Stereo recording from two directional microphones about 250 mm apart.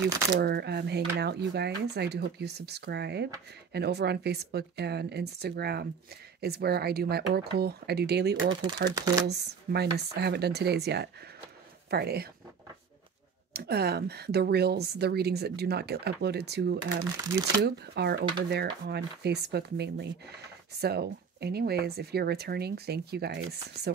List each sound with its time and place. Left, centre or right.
0.4 s a woman's voice: right
8.9 s speech: centre
9.3 s a woman's voice: right
13.5 s a woman's voice: right
17.0 s speech: centre
17.6 s a woman's voice: right